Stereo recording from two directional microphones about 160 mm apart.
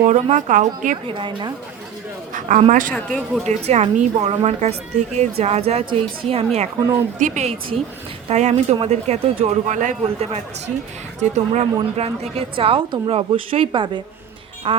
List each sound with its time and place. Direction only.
0.1 s a woman's voice: 50° right (ahead or behind)
1.0 s a woman's voice: 30° right (ahead or behind)
2.3 s a man's voice: 50° right (ahead or behind)
2.9 s speech: centre (ahead or behind)
3.4 s a woman's voice: 45° right (ahead or behind)